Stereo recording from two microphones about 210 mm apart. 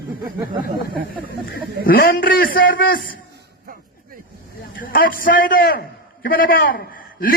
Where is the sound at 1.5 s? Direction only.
45° left (ahead or behind).